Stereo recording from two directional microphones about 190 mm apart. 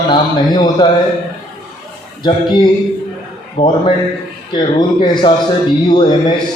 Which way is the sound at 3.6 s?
25° left (ahead or behind).